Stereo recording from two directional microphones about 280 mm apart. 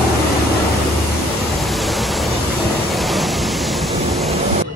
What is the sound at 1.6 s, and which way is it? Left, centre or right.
Waves, centre.